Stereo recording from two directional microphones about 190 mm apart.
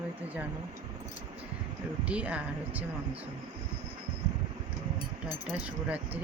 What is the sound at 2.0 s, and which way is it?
Speech, 5° right (ahead or behind).